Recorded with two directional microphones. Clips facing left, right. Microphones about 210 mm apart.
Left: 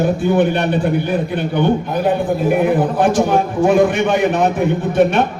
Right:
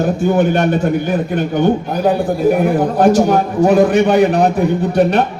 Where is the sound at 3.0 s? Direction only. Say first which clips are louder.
Right 6 dB; 40° right (ahead or behind).